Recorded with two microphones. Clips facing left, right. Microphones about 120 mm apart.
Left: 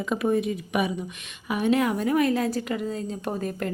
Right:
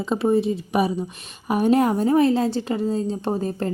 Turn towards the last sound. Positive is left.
turn(degrees=-30)  # may be behind; listen again after turning